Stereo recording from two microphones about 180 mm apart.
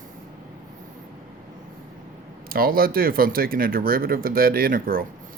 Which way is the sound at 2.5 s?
55° right (ahead or behind).